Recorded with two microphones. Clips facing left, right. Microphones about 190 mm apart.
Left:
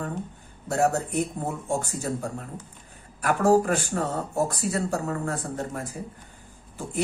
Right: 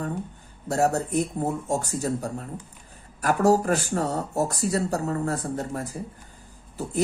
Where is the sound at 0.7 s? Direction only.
40° right (ahead or behind).